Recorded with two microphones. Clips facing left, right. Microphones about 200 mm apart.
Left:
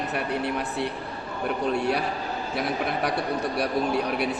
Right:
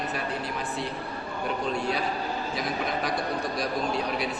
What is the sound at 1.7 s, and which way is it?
Speech, 65° left (ahead or behind).